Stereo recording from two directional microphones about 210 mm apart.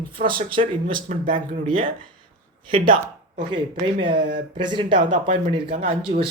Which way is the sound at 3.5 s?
25° right (ahead or behind).